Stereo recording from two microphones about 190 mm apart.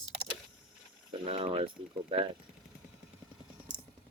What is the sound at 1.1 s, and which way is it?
Speech, 30° right (ahead or behind).